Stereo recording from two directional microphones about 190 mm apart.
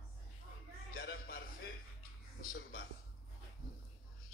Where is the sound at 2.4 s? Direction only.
45° left (ahead or behind).